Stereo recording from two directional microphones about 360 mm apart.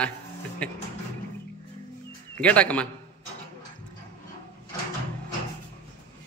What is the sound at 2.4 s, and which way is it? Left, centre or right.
Speech, centre.